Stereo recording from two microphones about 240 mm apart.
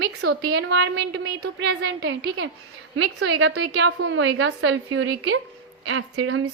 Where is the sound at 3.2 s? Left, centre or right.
Right.